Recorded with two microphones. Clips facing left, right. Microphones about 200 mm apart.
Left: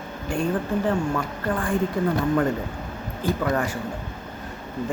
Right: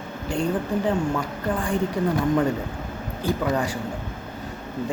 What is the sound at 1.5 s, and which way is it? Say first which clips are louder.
Speech: left 1 dB; 15° right (ahead or behind).